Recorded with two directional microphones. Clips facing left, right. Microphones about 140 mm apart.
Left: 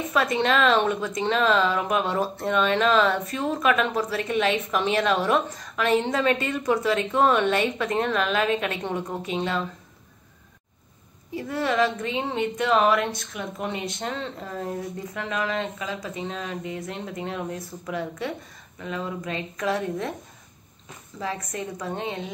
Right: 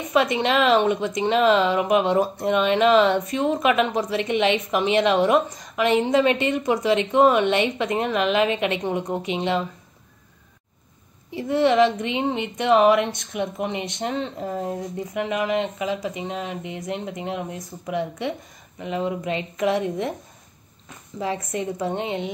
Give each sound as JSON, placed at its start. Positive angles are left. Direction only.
{"t": 0.4, "sound": "speech", "side_deg": -10}
{"t": 11.3, "sound": "speech", "side_deg": -25}
{"t": 21.2, "sound": "speech", "side_deg": -25}